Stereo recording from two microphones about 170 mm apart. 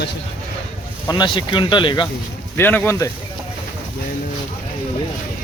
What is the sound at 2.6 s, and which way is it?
Speech, 10° left (ahead or behind).